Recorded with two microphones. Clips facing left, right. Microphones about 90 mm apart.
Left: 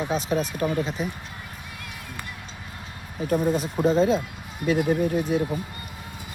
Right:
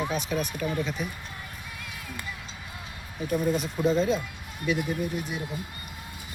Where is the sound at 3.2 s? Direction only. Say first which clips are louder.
Left 3 dB; 35° left (ahead or behind).